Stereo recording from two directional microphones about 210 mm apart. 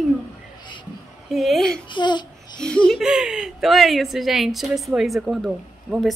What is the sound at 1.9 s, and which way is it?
Speech, 20° left (ahead or behind).